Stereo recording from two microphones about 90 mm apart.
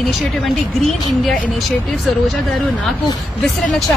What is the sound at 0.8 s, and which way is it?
A woman's voice, 5° left (ahead or behind).